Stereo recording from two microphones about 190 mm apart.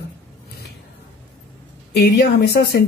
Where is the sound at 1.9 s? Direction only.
60° left (ahead or behind).